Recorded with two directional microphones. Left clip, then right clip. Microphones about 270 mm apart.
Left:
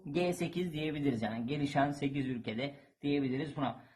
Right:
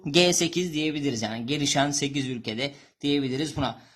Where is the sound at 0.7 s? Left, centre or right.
Centre.